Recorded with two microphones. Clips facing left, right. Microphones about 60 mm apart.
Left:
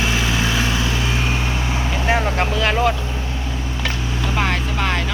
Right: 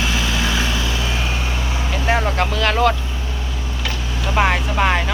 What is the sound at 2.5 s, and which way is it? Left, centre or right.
Vehicle, left.